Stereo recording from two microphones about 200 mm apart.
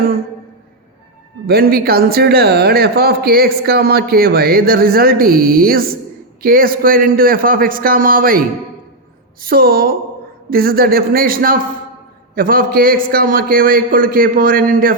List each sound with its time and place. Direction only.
1.5 s speech: 50° right (ahead or behind)